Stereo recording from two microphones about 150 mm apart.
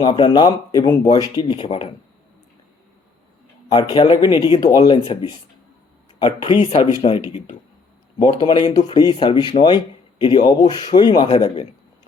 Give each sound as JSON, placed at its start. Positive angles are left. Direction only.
{"t": 0.0, "sound": "speech", "side_deg": 30}
{"t": 3.7, "sound": "speech", "side_deg": 30}
{"t": 6.6, "sound": "speech", "side_deg": 45}
{"t": 8.4, "sound": "speech", "side_deg": 30}